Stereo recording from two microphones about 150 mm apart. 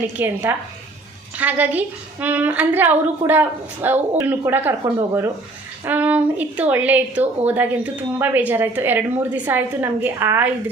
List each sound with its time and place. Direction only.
0.2 s speech: 15° right (ahead or behind)
1.4 s speech: 10° right (ahead or behind)